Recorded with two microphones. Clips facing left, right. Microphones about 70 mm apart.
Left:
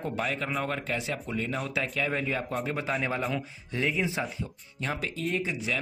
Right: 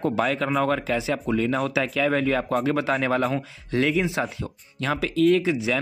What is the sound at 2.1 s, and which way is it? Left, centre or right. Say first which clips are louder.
Speech: right 8 dB; right.